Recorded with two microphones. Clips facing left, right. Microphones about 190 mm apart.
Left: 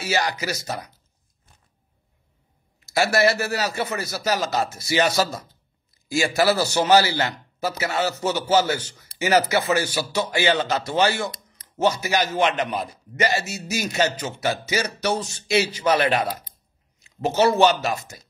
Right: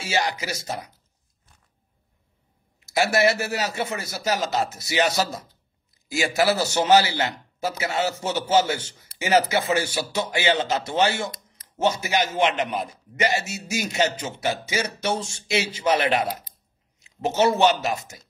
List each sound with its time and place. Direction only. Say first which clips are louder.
0.0 s a man's voice: left 1 dB; 25° right (ahead or behind)
2.8 s a man's voice: left 1 dB; 20° right (ahead or behind)